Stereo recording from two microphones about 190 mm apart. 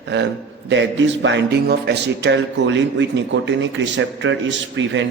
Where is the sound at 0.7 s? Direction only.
70° right (ahead or behind).